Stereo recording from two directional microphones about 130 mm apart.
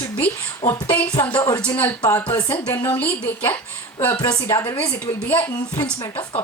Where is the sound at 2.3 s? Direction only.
35° left (ahead or behind).